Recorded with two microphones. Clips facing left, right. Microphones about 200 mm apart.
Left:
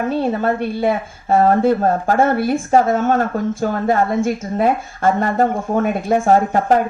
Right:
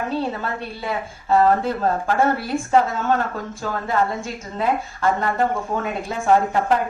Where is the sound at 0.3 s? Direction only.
55° left (ahead or behind).